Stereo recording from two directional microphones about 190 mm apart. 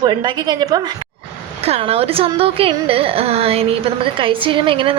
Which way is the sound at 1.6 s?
30° right (ahead or behind).